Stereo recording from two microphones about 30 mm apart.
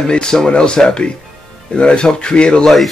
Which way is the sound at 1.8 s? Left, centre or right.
Left.